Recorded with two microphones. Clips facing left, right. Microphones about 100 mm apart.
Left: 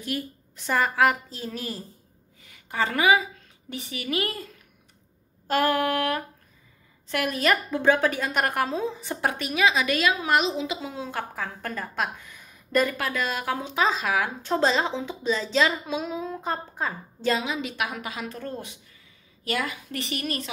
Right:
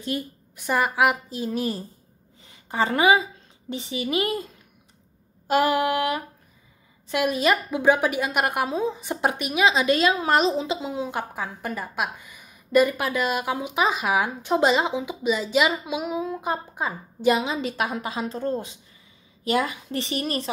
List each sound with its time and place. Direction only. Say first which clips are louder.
0.1 s a woman's voice: even; 25° right (ahead or behind)
0.6 s a woman's voice: right 1 dB; 15° right (ahead or behind)
5.5 s a woman's voice: right 2 dB; 15° right (ahead or behind); by 10.8 s 35° right (ahead or behind)
10.8 s a woman's voice: right 4 dB; 20° right (ahead or behind)
17.4 s a woman's voice: right 3 dB; 30° right (ahead or behind)